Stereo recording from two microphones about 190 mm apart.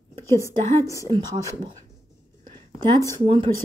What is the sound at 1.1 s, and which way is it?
Speech, 20° right (ahead or behind).